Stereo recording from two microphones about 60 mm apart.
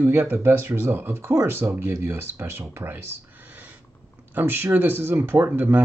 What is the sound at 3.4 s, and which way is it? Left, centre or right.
Owl, right.